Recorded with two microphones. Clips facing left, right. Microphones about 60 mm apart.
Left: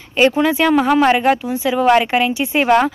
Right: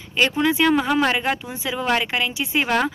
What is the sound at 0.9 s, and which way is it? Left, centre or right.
Speech, left.